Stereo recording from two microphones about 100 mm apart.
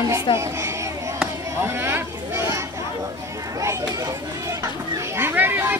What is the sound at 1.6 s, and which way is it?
Speech, 25° right (ahead or behind).